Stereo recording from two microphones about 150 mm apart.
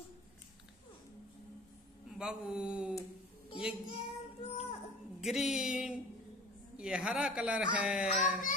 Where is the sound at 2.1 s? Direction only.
5° right (ahead or behind).